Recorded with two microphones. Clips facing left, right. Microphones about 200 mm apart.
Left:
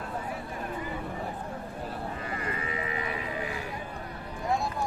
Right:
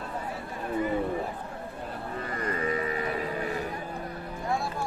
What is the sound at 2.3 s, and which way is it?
Sheep, 40° right (ahead or behind).